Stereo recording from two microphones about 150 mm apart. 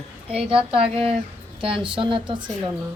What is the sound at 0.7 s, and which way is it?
A woman's voice, 40° right (ahead or behind).